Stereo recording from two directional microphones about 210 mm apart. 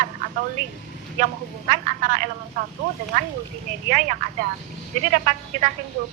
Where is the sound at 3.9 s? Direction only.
40° right (ahead or behind).